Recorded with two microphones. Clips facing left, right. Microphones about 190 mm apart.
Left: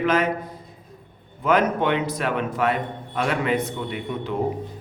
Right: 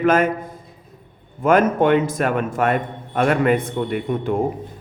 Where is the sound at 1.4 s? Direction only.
50° right (ahead or behind).